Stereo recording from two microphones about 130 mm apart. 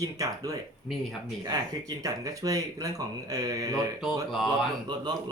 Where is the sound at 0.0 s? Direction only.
25° right (ahead or behind).